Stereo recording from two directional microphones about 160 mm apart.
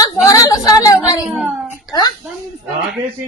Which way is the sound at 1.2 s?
5° right (ahead or behind).